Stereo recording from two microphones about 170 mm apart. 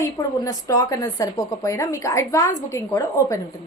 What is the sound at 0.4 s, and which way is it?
A woman's voice, 20° left (ahead or behind).